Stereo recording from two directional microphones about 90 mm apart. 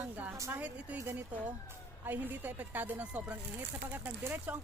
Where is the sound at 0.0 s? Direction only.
15° right (ahead or behind).